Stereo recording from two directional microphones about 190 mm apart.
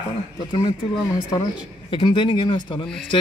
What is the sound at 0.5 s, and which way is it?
Speech, 20° left (ahead or behind).